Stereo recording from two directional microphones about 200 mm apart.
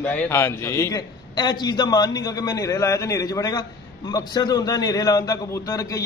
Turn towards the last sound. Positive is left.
turn(degrees=15)  # may be behind; listen again after turning